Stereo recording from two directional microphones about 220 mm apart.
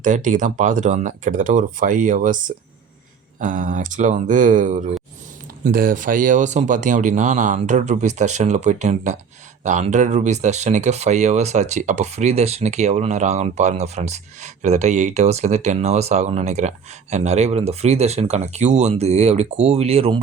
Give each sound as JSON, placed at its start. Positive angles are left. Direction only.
{"t": 0.0, "sound": "speech", "side_deg": -35}
{"t": 3.4, "sound": "speech", "side_deg": -35}